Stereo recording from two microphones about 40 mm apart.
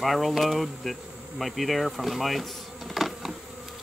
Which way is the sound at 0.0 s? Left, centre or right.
Centre.